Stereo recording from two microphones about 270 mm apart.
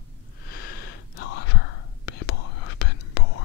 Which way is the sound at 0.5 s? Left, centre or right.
Left.